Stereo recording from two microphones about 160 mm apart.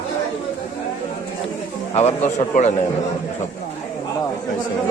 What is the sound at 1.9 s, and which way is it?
Speech, 40° left (ahead or behind).